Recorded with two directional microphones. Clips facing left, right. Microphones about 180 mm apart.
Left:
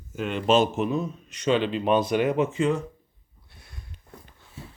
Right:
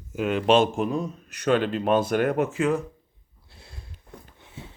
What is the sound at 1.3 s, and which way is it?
Speech, 55° right (ahead or behind).